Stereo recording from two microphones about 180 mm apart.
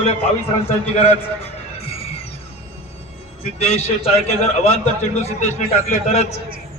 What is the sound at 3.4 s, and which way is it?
Speech, 35° left (ahead or behind).